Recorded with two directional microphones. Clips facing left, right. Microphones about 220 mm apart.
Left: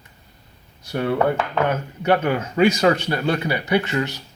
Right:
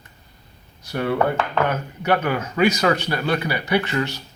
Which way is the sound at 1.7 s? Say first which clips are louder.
Left 2 dB; 25° left (ahead or behind).